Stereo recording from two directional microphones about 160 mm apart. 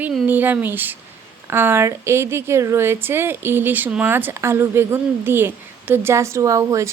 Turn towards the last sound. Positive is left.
turn(degrees=-20)  # may be behind; listen again after turning